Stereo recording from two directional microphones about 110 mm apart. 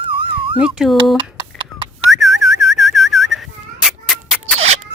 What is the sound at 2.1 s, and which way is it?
Whistling, centre (ahead or behind).